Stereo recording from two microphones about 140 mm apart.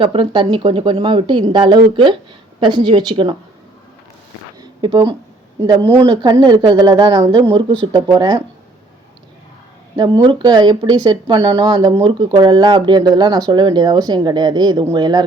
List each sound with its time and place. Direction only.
0.0 s speech: 35° right (ahead or behind)
4.8 s speech: 35° right (ahead or behind)
6.1 s speech: 30° right (ahead or behind)
9.9 s speech: 30° right (ahead or behind)